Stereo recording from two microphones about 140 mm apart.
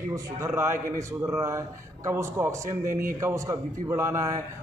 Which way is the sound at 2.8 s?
75° right (ahead or behind).